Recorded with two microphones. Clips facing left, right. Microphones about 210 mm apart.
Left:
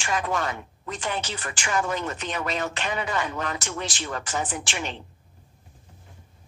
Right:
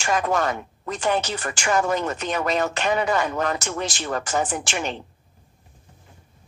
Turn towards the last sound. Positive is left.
turn(degrees=-45)  # may be behind; listen again after turning